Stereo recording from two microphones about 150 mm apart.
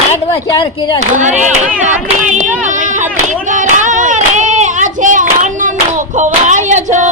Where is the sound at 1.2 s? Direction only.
55° right (ahead or behind).